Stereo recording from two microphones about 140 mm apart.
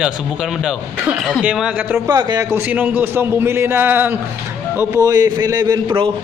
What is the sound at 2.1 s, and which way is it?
A man's voice, 30° right (ahead or behind).